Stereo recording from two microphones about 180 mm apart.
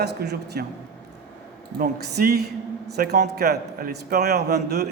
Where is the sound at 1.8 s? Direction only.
60° right (ahead or behind).